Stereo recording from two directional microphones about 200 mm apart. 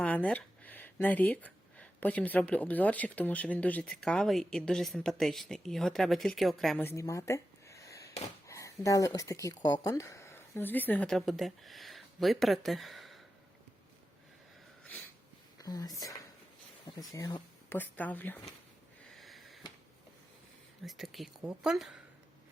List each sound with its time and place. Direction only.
0.0 s speech: 5° left (ahead or behind)
6.8 s a sound: 15° left (ahead or behind)
8.4 s speech: 15° left (ahead or behind)
15.5 s speech: 20° left (ahead or behind)
19.1 s sniff: centre (ahead or behind)
20.8 s a woman's voice: centre (ahead or behind)